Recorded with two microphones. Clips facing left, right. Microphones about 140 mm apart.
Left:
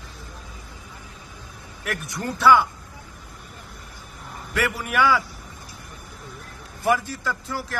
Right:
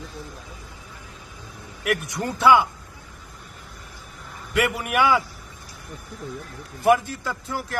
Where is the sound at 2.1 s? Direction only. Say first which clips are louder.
Even; 15° right (ahead or behind).